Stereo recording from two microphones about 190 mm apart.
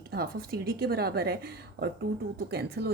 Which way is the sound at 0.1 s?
55° right (ahead or behind).